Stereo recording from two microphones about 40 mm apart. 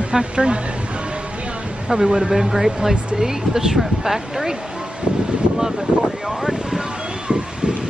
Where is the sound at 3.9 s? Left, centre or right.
Centre.